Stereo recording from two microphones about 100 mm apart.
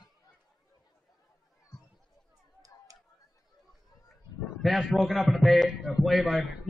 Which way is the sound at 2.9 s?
35° right (ahead or behind).